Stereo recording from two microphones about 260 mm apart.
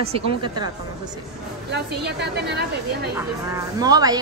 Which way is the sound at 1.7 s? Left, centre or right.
Right.